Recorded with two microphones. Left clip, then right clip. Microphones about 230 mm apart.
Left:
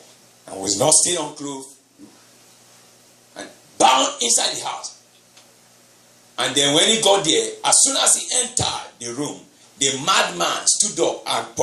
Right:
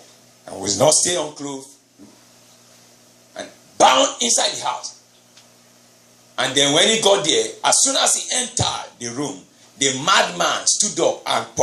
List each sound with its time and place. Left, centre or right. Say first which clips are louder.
0.6 s a man's voice: right 3 dB; right
3.3 s a sound: right 2 dB; right
6.3 s a man's voice: right 1 dB; right